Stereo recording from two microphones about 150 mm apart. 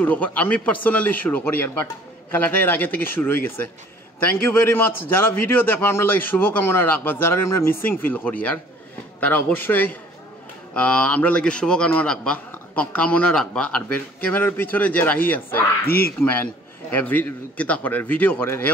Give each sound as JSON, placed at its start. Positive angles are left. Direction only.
{"t": 0.0, "sound": "a man's voice", "side_deg": 10}